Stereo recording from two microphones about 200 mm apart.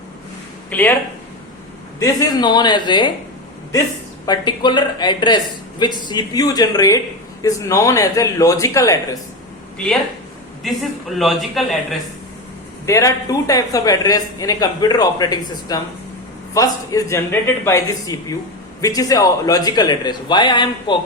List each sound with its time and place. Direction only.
0.7 s a man's voice: 10° left (ahead or behind)
2.0 s speech: 20° left (ahead or behind)
4.3 s a man's voice: 20° left (ahead or behind)
9.7 s speech: 5° left (ahead or behind)
12.8 s a man's voice: 15° left (ahead or behind)